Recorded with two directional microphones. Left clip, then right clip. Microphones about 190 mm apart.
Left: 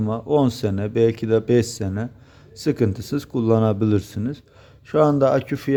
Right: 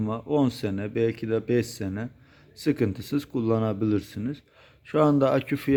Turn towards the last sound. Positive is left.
turn(degrees=-10)  # may be behind; listen again after turning